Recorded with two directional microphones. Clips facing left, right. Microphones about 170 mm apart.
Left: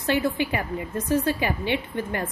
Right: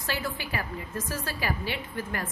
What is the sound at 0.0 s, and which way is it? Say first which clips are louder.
A woman's voice: left 10 dB; 25° left (ahead or behind).